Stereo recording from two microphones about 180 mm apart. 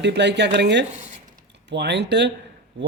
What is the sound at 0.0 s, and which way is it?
A man's voice, 75° right (ahead or behind).